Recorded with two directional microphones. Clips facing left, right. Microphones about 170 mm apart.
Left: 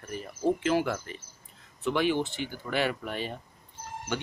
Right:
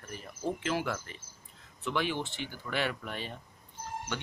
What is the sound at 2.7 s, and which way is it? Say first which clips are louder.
Speech: left 4 dB; 5° left (ahead or behind).